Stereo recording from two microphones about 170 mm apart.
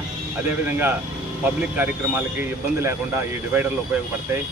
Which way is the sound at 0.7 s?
10° right (ahead or behind).